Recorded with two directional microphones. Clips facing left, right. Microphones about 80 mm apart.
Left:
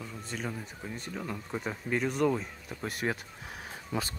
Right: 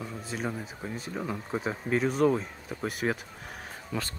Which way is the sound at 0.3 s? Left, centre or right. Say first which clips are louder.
Right 3 dB; centre.